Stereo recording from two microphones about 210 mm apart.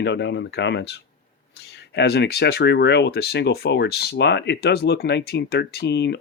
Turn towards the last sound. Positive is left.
turn(degrees=55)  # may be behind; listen again after turning